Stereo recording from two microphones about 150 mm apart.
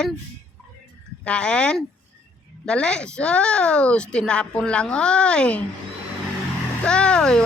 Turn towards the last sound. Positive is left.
turn(degrees=5)  # may be behind; listen again after turning